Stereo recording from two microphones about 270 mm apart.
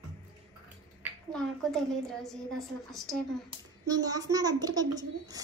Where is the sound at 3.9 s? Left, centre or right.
Centre.